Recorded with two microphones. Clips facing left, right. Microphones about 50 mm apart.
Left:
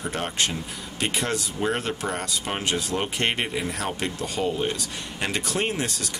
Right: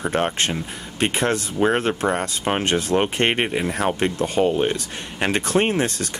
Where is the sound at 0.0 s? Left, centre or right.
Right.